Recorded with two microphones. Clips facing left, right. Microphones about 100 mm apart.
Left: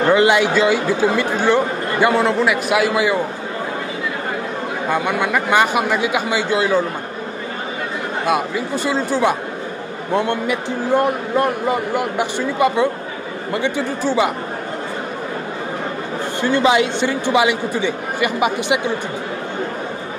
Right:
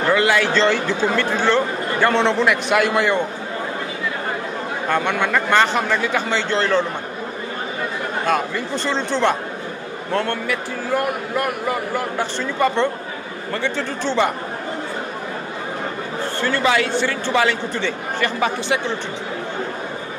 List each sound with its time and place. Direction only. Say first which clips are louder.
0.0 s a man's voice: left 4 dB; 20° left (ahead or behind)
0.5 s speech: left 2 dB; 10° left (ahead or behind)
4.8 s speech: left 1 dB; 10° left (ahead or behind)
8.3 s a man's voice: left 2 dB; 5° left (ahead or behind)
16.3 s speech: left 4 dB; 20° left (ahead or behind)